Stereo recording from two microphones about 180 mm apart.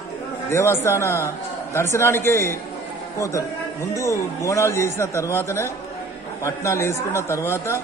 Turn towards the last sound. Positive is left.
turn(degrees=15)  # may be behind; listen again after turning